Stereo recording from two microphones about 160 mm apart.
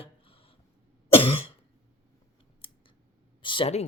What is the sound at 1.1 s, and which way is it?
Cough, 35° left (ahead or behind).